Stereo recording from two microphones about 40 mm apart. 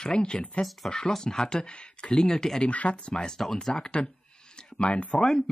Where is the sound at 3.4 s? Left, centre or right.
Centre.